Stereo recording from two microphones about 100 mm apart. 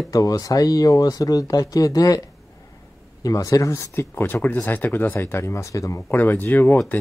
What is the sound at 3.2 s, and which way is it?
Speech, 35° left (ahead or behind).